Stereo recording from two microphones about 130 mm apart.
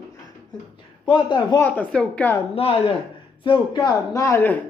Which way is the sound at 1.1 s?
35° left (ahead or behind).